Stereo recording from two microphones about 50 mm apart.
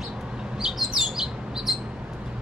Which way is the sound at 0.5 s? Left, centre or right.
Centre.